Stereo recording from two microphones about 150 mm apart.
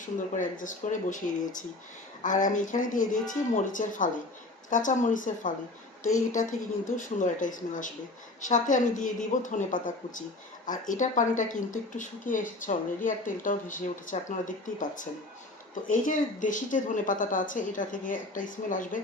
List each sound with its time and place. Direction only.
0.0 s speech: 60° left (ahead or behind)
6.9 s speech: 60° left (ahead or behind)